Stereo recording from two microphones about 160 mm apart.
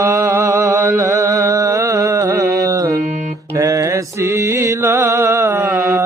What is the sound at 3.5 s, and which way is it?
Music, 20° right (ahead or behind).